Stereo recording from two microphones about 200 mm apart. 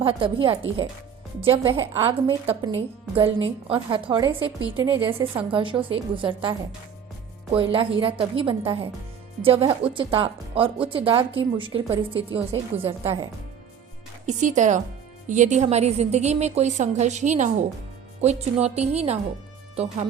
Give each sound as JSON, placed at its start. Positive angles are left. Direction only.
{"t": 0.0, "sound": "a woman's voice", "side_deg": -25}
{"t": 14.3, "sound": "a woman's voice", "side_deg": -40}